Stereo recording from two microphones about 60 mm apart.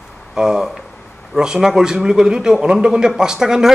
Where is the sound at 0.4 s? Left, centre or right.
Centre.